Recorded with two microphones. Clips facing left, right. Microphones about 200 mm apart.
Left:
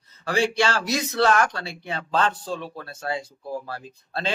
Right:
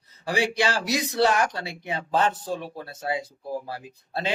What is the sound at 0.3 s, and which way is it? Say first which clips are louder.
Speech: left 2 dB; 15° right (ahead or behind).